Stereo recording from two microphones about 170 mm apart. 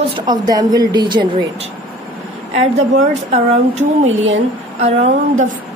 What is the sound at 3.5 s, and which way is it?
A woman's voice, 45° right (ahead or behind).